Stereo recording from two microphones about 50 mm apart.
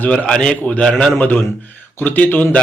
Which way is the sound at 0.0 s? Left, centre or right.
Left.